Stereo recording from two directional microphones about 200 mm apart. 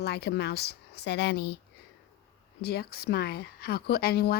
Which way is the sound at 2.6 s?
55° left (ahead or behind).